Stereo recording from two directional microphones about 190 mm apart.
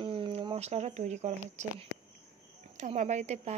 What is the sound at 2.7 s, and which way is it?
Speech, 40° right (ahead or behind).